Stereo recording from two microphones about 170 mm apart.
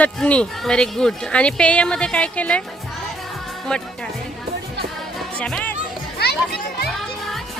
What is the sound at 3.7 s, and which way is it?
Speech, 5° left (ahead or behind).